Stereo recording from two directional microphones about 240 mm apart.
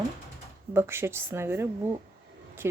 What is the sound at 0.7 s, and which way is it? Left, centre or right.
Speech, centre.